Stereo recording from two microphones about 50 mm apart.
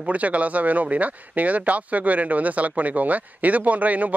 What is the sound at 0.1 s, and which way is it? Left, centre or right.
Speech, right.